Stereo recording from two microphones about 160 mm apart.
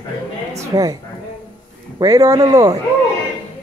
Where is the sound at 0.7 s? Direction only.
25° right (ahead or behind).